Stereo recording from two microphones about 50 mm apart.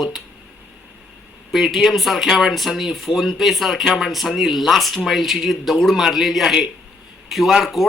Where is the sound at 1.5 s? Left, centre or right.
Centre.